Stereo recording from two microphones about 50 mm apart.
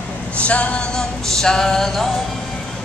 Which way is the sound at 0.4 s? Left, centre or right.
Left.